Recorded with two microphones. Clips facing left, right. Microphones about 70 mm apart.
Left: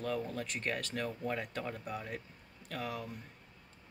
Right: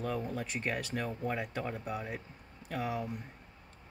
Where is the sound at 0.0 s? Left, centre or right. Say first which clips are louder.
Right 1 dB; centre.